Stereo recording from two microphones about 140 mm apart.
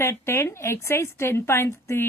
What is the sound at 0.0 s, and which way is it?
A woman's voice, 20° left (ahead or behind).